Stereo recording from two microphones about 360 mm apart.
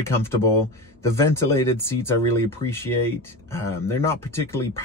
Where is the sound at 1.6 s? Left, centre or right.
Centre.